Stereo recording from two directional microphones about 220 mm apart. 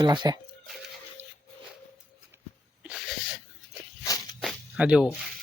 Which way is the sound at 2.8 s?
Centre (ahead or behind).